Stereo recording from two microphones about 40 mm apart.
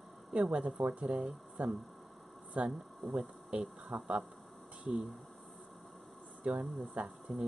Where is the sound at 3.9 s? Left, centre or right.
Centre.